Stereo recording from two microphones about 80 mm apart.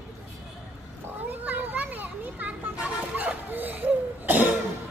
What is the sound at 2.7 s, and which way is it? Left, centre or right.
Cough, centre.